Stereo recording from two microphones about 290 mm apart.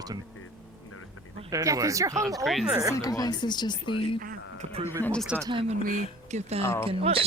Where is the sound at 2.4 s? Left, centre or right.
Centre.